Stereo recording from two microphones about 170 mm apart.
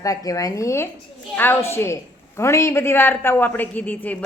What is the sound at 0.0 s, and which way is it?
A woman's voice, 20° left (ahead or behind).